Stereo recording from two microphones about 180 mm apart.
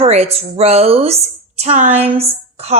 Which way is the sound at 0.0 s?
35° right (ahead or behind).